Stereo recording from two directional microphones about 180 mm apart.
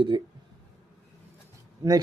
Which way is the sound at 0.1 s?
20° right (ahead or behind).